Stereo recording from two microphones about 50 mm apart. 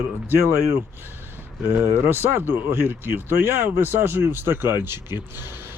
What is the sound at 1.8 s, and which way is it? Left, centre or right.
Speech, right.